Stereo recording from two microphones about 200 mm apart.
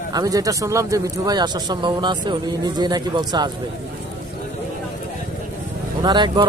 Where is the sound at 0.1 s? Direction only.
20° right (ahead or behind).